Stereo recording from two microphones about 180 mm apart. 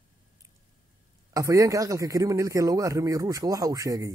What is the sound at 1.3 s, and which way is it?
A man's voice, 20° right (ahead or behind).